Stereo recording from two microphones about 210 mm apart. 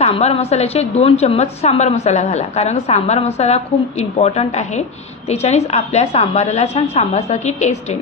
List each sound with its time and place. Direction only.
0.0 s a woman's voice: 30° left (ahead or behind)